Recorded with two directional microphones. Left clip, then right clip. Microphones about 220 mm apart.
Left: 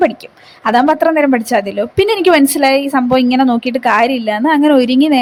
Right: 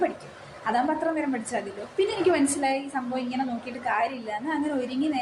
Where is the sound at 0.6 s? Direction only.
50° left (ahead or behind).